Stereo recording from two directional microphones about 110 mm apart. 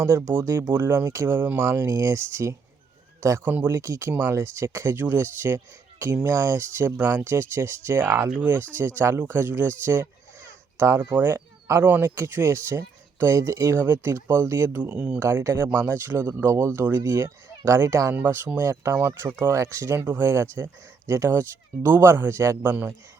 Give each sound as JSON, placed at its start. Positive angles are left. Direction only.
{"t": 0.0, "sound": "speech", "side_deg": -25}
{"t": 3.4, "sound": "speech", "side_deg": -15}
{"t": 3.7, "sound": "speech", "side_deg": -25}
{"t": 15.2, "sound": "speech", "side_deg": -25}